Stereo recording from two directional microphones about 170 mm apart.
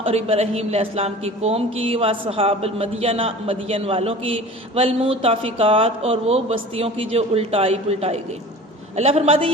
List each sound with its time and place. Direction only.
0.0 s speech: 35° right (ahead or behind)